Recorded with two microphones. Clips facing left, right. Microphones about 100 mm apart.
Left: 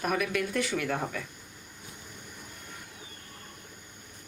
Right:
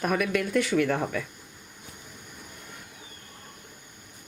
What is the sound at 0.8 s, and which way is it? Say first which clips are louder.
Speech: right 6 dB; 60° right (ahead or behind).